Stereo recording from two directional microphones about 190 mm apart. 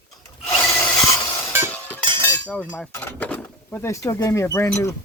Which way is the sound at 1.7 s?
10° left (ahead or behind).